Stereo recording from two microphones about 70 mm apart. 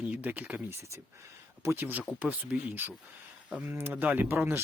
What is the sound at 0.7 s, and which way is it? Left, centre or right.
Speech, right.